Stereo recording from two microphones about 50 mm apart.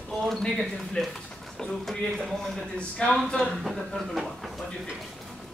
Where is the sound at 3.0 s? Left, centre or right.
Centre.